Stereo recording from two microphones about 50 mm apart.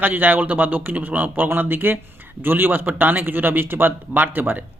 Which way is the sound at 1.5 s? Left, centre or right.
Right.